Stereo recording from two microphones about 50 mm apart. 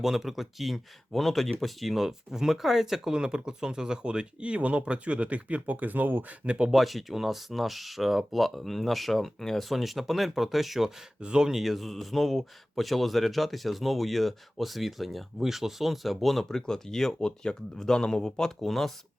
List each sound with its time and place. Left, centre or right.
0.0 s speech: centre; by 6.3 s right
6.4 s speech: right
6.7 s a man's voice: centre
11.2 s a man's voice: centre